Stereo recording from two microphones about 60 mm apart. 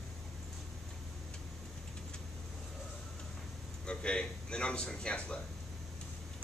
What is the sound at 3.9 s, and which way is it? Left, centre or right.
A man's voice, centre.